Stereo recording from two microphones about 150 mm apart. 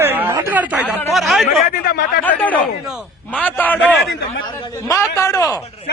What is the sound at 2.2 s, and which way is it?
A man's voice, 10° left (ahead or behind).